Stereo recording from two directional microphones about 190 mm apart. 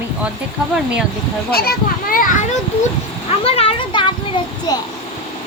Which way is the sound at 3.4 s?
30° left (ahead or behind).